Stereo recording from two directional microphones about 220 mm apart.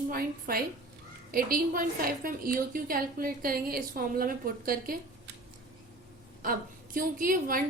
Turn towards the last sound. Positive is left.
turn(degrees=-40)  # may be behind; listen again after turning